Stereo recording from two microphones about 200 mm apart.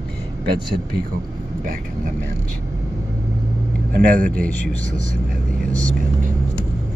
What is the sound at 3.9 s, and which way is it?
Speech, 45° right (ahead or behind).